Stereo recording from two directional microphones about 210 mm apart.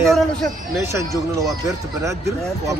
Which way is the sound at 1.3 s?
15° right (ahead or behind).